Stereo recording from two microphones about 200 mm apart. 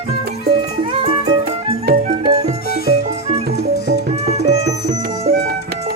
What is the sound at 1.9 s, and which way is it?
Music, 50° right (ahead or behind).